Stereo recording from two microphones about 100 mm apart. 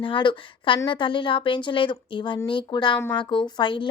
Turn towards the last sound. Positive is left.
turn(degrees=55)  # may be behind; listen again after turning